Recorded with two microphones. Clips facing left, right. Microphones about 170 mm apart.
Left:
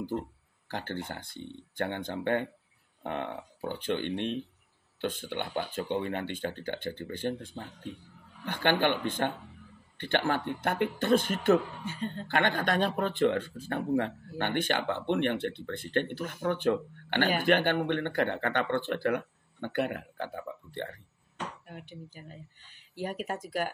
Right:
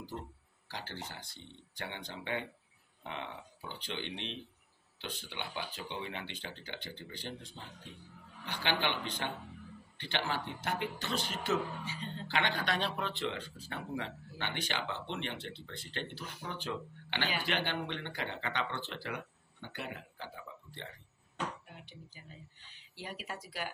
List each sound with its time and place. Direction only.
0.1 s speech: 55° left (ahead or behind)